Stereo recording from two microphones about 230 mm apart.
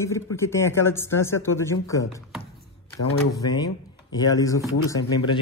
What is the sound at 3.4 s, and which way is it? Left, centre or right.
A man's voice, centre.